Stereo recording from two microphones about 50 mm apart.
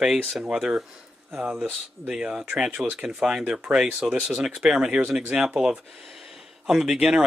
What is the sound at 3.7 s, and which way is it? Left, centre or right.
Speech, centre.